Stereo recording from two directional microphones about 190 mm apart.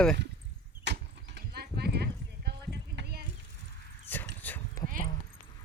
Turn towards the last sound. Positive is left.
turn(degrees=10)  # may be behind; listen again after turning